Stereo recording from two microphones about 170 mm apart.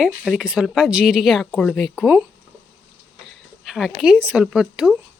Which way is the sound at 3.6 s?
5° right (ahead or behind).